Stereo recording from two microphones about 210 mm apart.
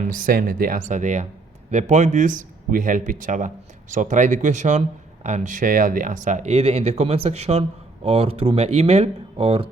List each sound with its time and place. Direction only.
0.0 s speech: 40° right (ahead or behind)